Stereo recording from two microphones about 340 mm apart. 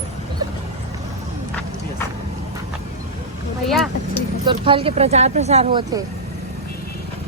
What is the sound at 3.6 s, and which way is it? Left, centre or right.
Vehicle, centre.